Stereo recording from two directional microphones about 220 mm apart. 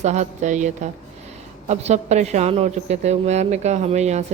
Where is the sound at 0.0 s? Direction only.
30° right (ahead or behind).